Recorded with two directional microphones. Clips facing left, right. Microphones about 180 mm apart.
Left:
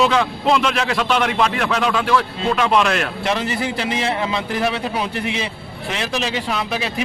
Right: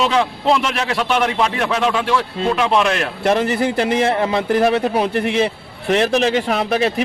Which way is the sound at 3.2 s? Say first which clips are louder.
Right 8 dB; 50° right (ahead or behind).